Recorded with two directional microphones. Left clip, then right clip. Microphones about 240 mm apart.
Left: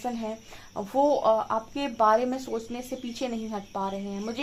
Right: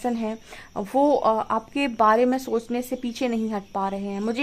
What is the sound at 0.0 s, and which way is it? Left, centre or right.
Speech, right.